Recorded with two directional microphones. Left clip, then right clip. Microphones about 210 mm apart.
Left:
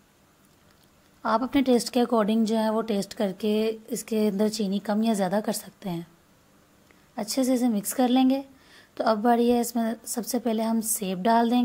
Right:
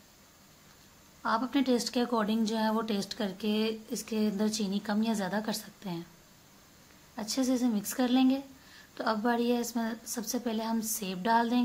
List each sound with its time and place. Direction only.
1.2 s speech: 35° left (ahead or behind)
7.2 s speech: 30° left (ahead or behind)